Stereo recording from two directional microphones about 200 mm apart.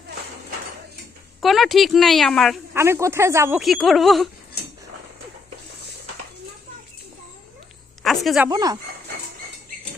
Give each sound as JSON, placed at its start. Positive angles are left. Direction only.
{"t": 1.4, "sound": "speech", "side_deg": 0}
{"t": 2.7, "sound": "speech", "side_deg": -15}
{"t": 3.6, "sound": "speech", "side_deg": 0}
{"t": 8.0, "sound": "a sound", "side_deg": 0}
{"t": 8.4, "sound": "speech", "side_deg": -20}